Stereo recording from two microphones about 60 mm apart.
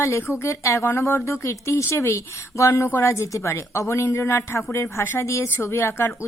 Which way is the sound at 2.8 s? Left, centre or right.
Left.